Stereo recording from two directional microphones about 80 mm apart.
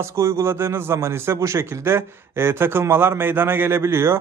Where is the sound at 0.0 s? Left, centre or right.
Right.